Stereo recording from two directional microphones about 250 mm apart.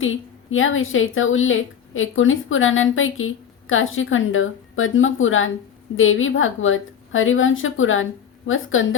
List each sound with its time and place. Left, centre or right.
0.0 s a woman's voice: left